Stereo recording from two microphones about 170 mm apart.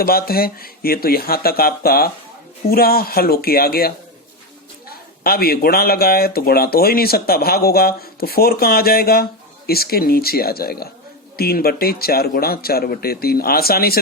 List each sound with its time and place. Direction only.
0.0 s speech: 65° left (ahead or behind)